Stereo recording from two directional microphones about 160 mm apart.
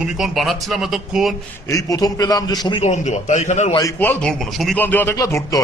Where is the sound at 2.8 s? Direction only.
45° left (ahead or behind).